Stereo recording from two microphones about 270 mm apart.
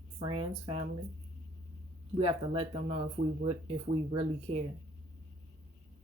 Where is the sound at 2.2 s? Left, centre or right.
Right.